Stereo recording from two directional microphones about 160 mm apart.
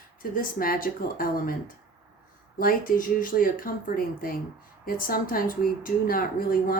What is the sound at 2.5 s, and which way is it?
A woman's voice, 60° left (ahead or behind).